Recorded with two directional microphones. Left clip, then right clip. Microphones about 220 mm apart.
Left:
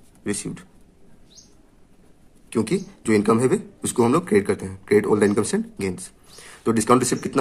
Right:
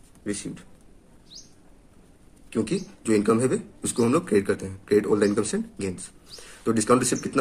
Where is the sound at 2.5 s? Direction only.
35° left (ahead or behind).